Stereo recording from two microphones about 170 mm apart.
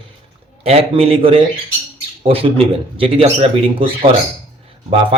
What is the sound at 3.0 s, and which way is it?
Speech, 35° right (ahead or behind).